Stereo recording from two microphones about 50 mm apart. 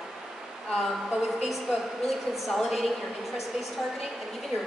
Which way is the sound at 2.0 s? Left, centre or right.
Centre.